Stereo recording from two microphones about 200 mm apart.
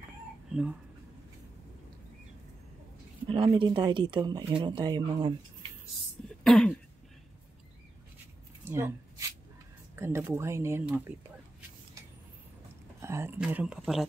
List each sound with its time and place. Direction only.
0.5 s speech: 5° right (ahead or behind)
3.3 s speech: 25° right (ahead or behind)
6.2 s throat clearing: 5° left (ahead or behind)
8.6 s speech: 10° right (ahead or behind)
9.9 s speech: 10° right (ahead or behind)
13.0 s speech: 10° right (ahead or behind)